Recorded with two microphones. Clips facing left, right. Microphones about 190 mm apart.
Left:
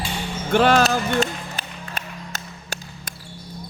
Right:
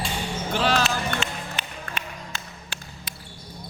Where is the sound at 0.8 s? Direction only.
40° left (ahead or behind).